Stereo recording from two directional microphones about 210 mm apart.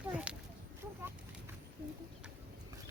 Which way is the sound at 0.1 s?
5° right (ahead or behind).